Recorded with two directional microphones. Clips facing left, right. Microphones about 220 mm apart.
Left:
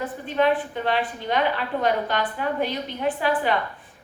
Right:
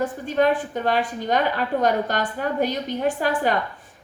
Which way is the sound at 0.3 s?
45° right (ahead or behind).